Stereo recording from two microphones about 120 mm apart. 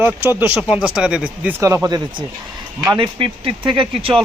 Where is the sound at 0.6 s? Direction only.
5° right (ahead or behind).